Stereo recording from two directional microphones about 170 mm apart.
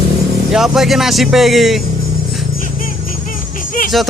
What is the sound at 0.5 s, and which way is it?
Speech, centre (ahead or behind).